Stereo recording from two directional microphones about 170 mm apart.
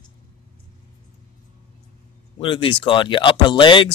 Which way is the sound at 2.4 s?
30° left (ahead or behind).